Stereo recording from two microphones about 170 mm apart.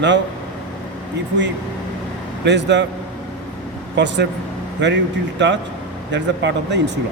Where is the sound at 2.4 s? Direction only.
90° right.